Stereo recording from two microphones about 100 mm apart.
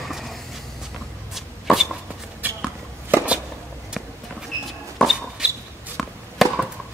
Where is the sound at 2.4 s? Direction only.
20° right (ahead or behind).